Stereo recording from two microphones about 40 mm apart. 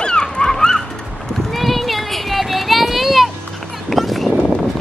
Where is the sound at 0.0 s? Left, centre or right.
Left.